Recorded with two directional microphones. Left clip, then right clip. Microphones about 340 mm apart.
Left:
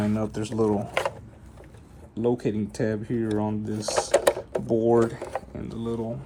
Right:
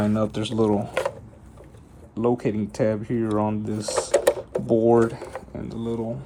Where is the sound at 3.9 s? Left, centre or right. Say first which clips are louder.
Right 1 dB; centre.